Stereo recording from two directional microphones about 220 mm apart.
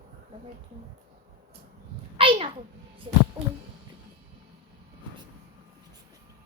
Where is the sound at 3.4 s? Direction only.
25° right (ahead or behind).